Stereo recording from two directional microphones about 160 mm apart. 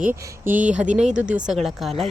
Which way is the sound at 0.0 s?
55° right (ahead or behind).